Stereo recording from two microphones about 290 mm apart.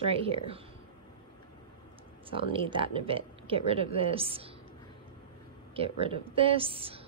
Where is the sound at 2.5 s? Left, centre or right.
Centre.